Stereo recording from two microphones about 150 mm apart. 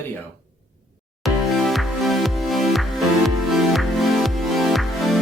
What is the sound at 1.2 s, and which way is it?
Music, centre (ahead or behind).